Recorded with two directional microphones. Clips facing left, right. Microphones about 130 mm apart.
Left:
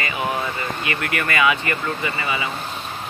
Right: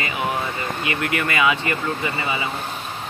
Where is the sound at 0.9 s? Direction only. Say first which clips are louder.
Right 2 dB; 25° right (ahead or behind).